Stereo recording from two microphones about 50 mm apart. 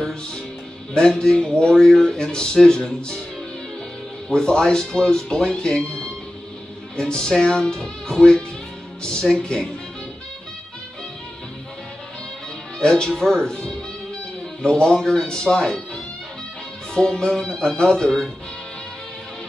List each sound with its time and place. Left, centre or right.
0.9 s speech: centre
4.3 s speech: centre
12.7 s speech: centre